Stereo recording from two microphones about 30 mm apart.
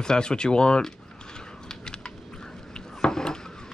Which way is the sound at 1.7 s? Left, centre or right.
Left.